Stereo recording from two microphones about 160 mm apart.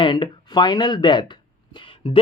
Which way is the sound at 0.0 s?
30° left (ahead or behind).